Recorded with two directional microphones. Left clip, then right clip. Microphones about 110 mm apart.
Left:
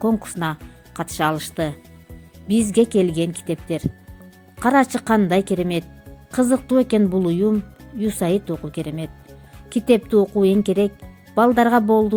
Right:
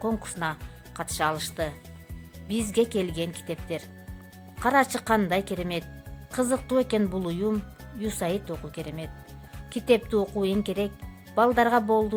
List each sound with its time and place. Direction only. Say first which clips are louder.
0.2 s speech: left 5 dB; 30° left (ahead or behind)